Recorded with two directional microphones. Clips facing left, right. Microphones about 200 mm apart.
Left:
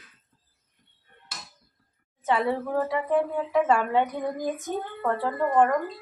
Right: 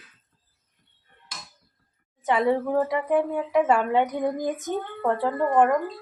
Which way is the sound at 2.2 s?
15° right (ahead or behind).